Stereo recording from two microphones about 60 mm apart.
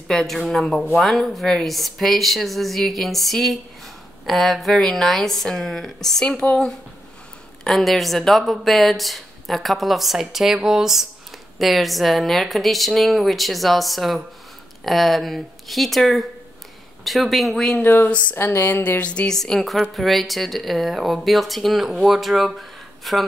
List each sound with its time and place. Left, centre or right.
0.1 s a woman's voice: centre
7.6 s speech: centre
17.8 s speech: left
18.8 s a sound: left
19.2 s speech: centre